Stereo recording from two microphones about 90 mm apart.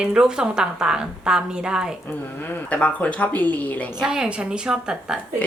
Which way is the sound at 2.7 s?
15° left (ahead or behind).